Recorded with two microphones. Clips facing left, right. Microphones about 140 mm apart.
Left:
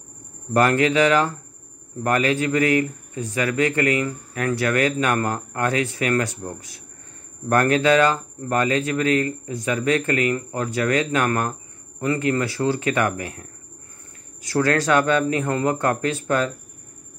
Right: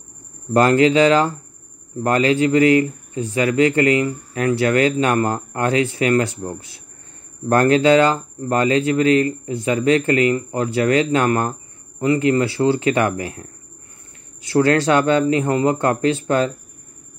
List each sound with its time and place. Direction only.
0.5 s speech: 25° right (ahead or behind)
14.5 s speech: 25° right (ahead or behind)